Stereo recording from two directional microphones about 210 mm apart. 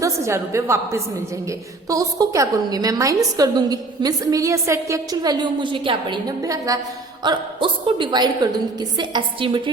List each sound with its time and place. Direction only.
0.0 s a woman's voice: 15° right (ahead or behind)